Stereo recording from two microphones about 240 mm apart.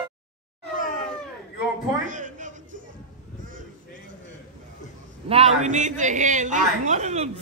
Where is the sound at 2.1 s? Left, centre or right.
Right.